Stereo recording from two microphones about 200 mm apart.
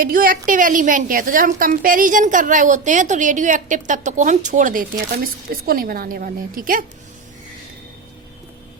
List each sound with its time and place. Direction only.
0.0 s a woman's voice: 45° right (ahead or behind)